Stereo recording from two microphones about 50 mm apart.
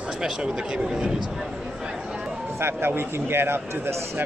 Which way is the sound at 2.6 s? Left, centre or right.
Right.